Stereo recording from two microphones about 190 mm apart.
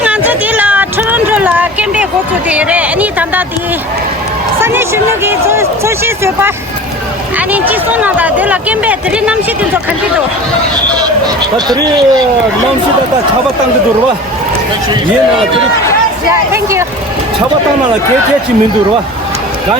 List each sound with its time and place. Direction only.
0.0 s a sound: 10° right (ahead or behind)
2.5 s speech: 5° right (ahead or behind)
4.6 s speech: 10° right (ahead or behind)
11.5 s speech: 20° right (ahead or behind)
16.3 s speech: 15° right (ahead or behind)